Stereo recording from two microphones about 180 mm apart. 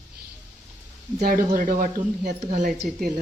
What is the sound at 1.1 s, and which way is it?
A woman's voice, 50° right (ahead or behind).